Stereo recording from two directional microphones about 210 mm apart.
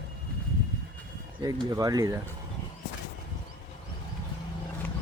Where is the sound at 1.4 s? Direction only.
15° right (ahead or behind).